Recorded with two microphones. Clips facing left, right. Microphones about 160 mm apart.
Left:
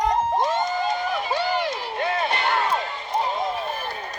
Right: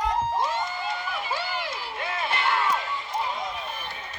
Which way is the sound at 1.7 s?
25° left (ahead or behind).